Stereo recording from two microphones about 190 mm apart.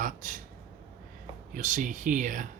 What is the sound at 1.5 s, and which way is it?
Speech, 40° right (ahead or behind).